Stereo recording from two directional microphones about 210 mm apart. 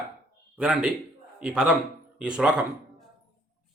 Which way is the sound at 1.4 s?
5° right (ahead or behind).